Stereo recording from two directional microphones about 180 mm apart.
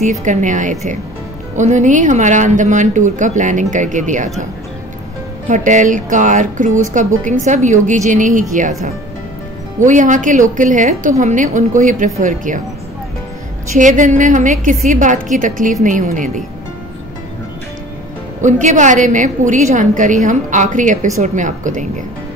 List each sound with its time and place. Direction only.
0.2 s a woman's voice: 45° right (ahead or behind)
5.5 s a woman's voice: 45° right (ahead or behind)
9.8 s a woman's voice: 45° right (ahead or behind)
13.7 s a woman's voice: 45° right (ahead or behind)
18.4 s a woman's voice: 45° right (ahead or behind)